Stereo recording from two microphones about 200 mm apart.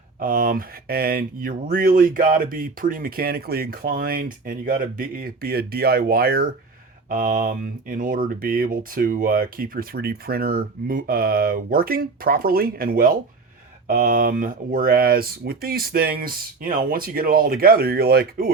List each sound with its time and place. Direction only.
0.2 s speech: 45° right (ahead or behind)